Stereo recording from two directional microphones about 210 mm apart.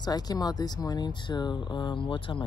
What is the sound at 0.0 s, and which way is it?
Speech, 20° left (ahead or behind).